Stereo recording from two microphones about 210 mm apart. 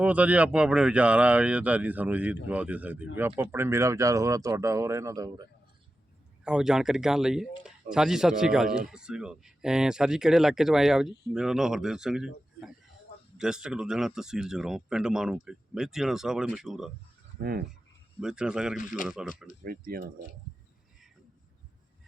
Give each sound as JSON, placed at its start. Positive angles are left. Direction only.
{"t": 0.0, "sound": "speech", "side_deg": -5}
{"t": 6.4, "sound": "speech", "side_deg": -5}
{"t": 17.4, "sound": "speech", "side_deg": -45}
{"t": 18.2, "sound": "speech", "side_deg": -5}
{"t": 19.6, "sound": "speech", "side_deg": -45}